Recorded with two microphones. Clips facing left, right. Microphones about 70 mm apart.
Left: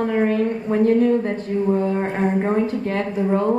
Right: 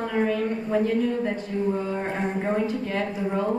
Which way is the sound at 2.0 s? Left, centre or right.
Left.